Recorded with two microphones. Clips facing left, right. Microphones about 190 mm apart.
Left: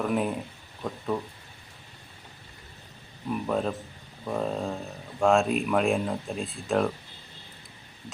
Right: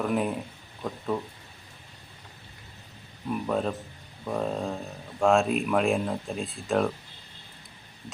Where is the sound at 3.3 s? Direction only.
Centre (ahead or behind).